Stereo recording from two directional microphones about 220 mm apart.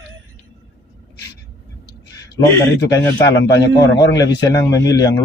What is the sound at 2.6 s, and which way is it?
A man's voice, 15° left (ahead or behind).